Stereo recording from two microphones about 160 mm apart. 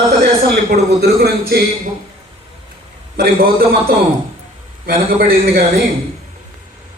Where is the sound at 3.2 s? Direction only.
70° right (ahead or behind).